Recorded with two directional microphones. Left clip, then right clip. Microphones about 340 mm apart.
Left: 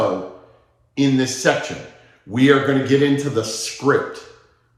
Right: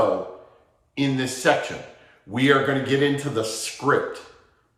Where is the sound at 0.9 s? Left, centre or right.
Centre.